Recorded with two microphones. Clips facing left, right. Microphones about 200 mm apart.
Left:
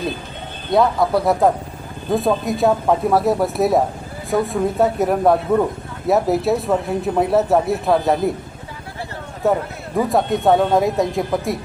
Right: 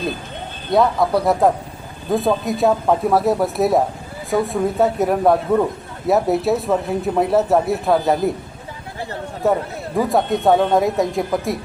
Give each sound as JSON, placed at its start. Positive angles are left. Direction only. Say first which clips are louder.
{"t": 0.7, "sound": "speech", "louder": "even", "side_deg": 0}
{"t": 9.4, "sound": "speech", "louder": "even", "side_deg": 0}